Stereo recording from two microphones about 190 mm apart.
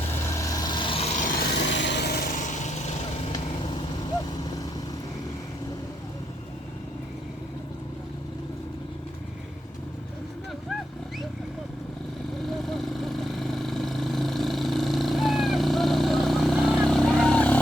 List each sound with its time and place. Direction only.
0.3 s a sound: 20° left (ahead or behind); by 1.5 s 45° left (ahead or behind)
1.5 s light engine: 70° left (ahead or behind); by 2.9 s 40° left (ahead or behind)
3.3 s vehicle: 25° left (ahead or behind)
12.5 s vehicle: centre (ahead or behind)